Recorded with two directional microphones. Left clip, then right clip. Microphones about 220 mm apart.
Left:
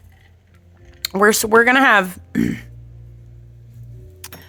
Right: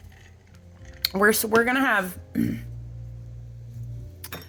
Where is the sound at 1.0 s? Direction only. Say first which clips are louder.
Left 6 dB; 30° left (ahead or behind); by 2.6 s 45° left (ahead or behind).